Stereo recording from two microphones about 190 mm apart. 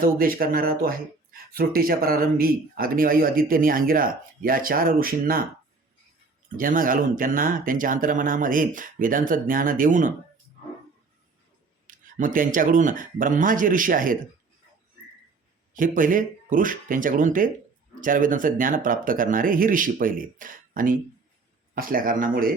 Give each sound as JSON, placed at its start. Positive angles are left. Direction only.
{"t": 0.0, "sound": "speech", "side_deg": -50}
{"t": 6.6, "sound": "speech", "side_deg": -45}
{"t": 11.9, "sound": "speech", "side_deg": -45}
{"t": 15.7, "sound": "speech", "side_deg": -45}